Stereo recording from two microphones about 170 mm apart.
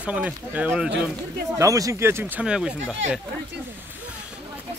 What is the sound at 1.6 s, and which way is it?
Speech, 20° right (ahead or behind).